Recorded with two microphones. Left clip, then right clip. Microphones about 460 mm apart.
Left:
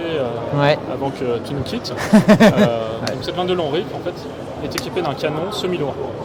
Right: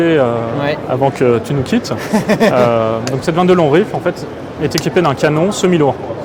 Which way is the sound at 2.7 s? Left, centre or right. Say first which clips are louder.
Right 7 dB; right.